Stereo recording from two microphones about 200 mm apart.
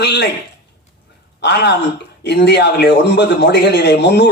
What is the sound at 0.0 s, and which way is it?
Speech, 55° left (ahead or behind).